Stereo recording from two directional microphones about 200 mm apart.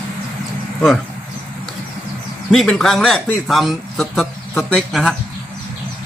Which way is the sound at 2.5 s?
5° left (ahead or behind).